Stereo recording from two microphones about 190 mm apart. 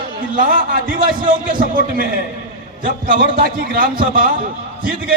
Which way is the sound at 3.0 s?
50° right (ahead or behind).